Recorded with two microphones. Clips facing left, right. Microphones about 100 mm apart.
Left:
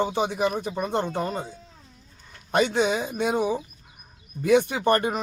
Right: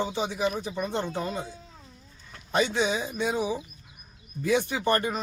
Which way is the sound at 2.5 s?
55° left (ahead or behind).